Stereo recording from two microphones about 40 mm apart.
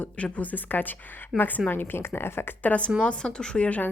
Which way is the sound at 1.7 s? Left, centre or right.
Left.